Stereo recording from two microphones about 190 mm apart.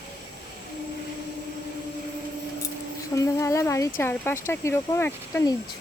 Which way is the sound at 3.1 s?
15° left (ahead or behind).